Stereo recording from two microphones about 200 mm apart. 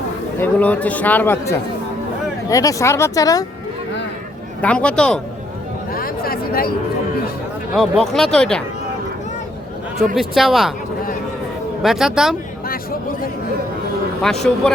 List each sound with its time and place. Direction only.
0.3 s speech: 10° left (ahead or behind)
4.6 s speech: 5° left (ahead or behind)
5.9 s a sound: 45° left (ahead or behind)
7.8 s speech: centre (ahead or behind)
10.2 s speech: centre (ahead or behind)
11.8 s speech: centre (ahead or behind)
14.2 s speech: centre (ahead or behind)